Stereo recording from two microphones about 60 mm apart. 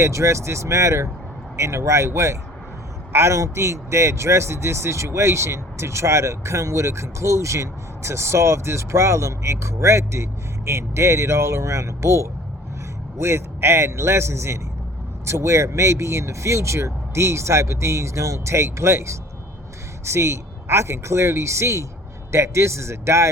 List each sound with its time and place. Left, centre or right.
0.0 s speech: right